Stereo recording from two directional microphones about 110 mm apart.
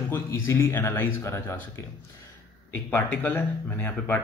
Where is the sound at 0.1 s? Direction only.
25° left (ahead or behind).